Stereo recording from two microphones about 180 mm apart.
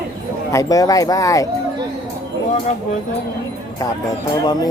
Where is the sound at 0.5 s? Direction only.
20° left (ahead or behind).